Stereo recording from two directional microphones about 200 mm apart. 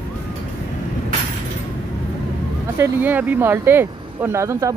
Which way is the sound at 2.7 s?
10° right (ahead or behind).